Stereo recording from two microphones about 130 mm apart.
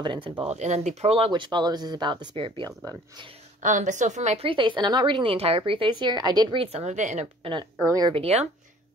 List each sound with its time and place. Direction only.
0.0 s speech: 40° right (ahead or behind)
0.5 s speech: 60° right (ahead or behind); by 2.7 s 40° right (ahead or behind)
2.8 s speech: 25° right (ahead or behind)
3.6 s a woman's voice: 75° right (ahead or behind)
4.5 s speech: 40° right (ahead or behind)
6.6 s speech: 55° right (ahead or behind)
7.8 s speech: 25° right (ahead or behind)
8.1 s speech: 50° right (ahead or behind)